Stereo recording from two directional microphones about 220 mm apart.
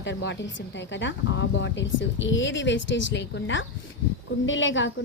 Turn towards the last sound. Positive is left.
turn(degrees=55)  # may be behind; listen again after turning